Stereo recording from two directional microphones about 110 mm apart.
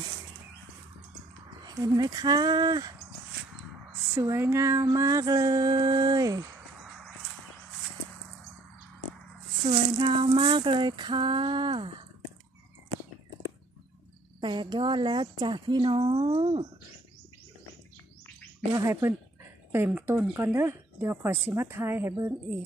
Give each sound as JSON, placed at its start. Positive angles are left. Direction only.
{"t": 1.6, "sound": "music", "side_deg": -40}
{"t": 4.1, "sound": "speech", "side_deg": -25}
{"t": 4.8, "sound": "music", "side_deg": -30}
{"t": 9.7, "sound": "a sound", "side_deg": -50}
{"t": 14.4, "sound": "a sound", "side_deg": -45}
{"t": 18.8, "sound": "speech", "side_deg": -25}